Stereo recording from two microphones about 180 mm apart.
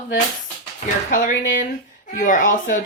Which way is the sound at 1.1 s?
45° left (ahead or behind).